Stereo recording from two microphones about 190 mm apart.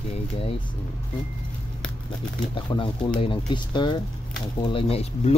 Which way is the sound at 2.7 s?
25° left (ahead or behind).